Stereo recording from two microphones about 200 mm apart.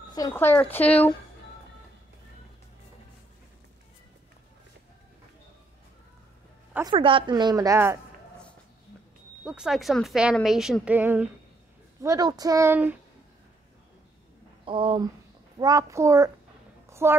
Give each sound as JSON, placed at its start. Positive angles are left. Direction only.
{"t": 0.1, "sound": "speech", "side_deg": 15}
{"t": 6.7, "sound": "a woman's voice", "side_deg": -20}
{"t": 9.4, "sound": "a woman's voice", "side_deg": -5}
{"t": 14.6, "sound": "speech", "side_deg": -25}